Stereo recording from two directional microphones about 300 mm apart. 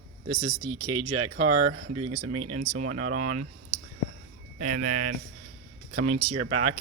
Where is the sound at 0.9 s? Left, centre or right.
Right.